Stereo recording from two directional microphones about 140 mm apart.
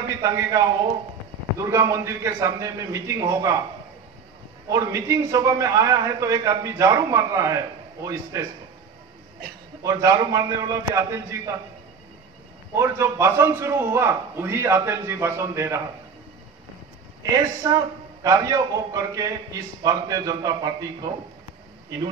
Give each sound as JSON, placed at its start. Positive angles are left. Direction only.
{"t": 0.2, "sound": "a man's voice", "side_deg": -25}
{"t": 4.6, "sound": "a man's voice", "side_deg": -25}
{"t": 9.8, "sound": "a man's voice", "side_deg": -25}
{"t": 12.7, "sound": "a man's voice", "side_deg": -20}
{"t": 17.6, "sound": "a man's voice", "side_deg": -25}